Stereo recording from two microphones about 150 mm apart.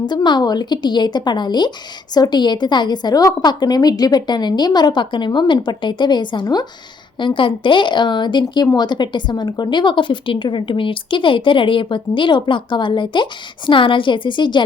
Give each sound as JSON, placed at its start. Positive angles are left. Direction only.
{"t": 0.1, "sound": "a woman's voice", "side_deg": 30}